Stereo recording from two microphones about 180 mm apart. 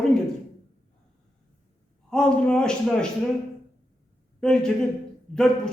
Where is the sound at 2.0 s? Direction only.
5° left (ahead or behind).